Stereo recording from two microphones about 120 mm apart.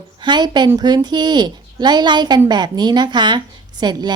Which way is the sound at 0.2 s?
40° right (ahead or behind).